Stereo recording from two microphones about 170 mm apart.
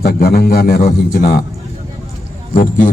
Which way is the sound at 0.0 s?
65° left (ahead or behind).